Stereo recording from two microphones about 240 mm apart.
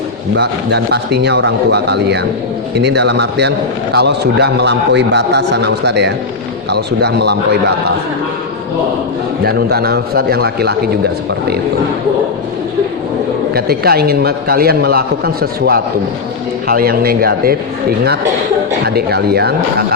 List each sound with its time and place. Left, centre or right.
0.3 s a man's voice: right
9.4 s a man's voice: right
13.5 s a man's voice: right
18.9 s a man's voice: right